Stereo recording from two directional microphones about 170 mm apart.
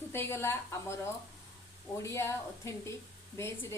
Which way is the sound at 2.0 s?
15° left (ahead or behind).